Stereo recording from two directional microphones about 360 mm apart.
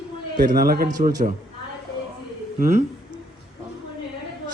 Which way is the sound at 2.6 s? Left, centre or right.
Right.